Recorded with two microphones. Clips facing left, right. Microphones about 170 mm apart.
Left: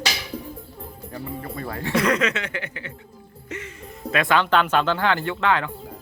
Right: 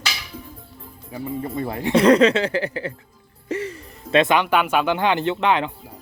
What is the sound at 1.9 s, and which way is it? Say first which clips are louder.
Speech: right 8 dB; 30° right (ahead or behind).